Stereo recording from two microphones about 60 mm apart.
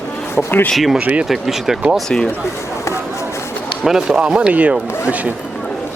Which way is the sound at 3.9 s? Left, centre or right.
Centre.